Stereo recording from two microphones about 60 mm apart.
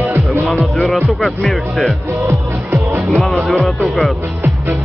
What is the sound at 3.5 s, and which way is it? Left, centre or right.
Music, centre.